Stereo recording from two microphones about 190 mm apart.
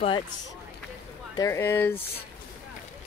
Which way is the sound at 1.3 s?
15° left (ahead or behind).